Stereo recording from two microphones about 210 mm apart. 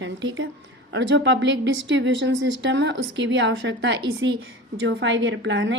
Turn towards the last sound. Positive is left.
turn(degrees=-60)  # may be behind; listen again after turning